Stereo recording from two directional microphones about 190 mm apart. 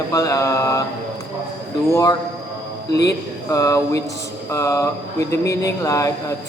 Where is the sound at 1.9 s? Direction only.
15° left (ahead or behind).